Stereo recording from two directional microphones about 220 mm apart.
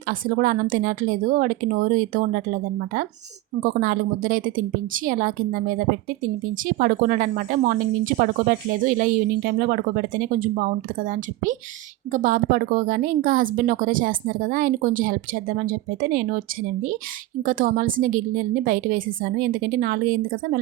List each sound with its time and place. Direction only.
0.1 s speech: 40° right (ahead or behind)
3.6 s speech: 40° right (ahead or behind)
6.7 s speech: 40° right (ahead or behind)